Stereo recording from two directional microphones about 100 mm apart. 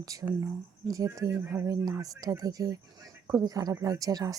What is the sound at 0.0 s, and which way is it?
Speech, 40° right (ahead or behind).